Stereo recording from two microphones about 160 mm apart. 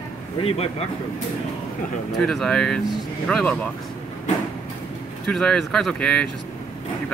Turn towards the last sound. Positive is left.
turn(degrees=5)  # may be behind; listen again after turning